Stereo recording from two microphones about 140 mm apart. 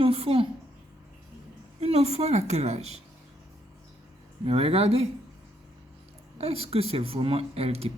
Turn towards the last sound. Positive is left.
turn(degrees=-45)  # may be behind; listen again after turning